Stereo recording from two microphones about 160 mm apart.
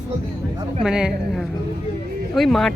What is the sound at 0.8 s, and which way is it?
Speech, 5° right (ahead or behind).